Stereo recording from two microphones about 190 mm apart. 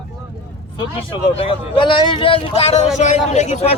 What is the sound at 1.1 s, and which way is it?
Speech, 30° left (ahead or behind).